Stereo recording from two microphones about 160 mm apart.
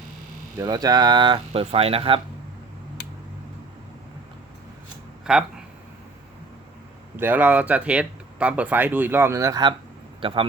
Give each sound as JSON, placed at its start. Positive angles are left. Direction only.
{"t": 0.5, "sound": "speech", "side_deg": -25}
{"t": 5.2, "sound": "speech", "side_deg": -5}
{"t": 7.2, "sound": "speech", "side_deg": -10}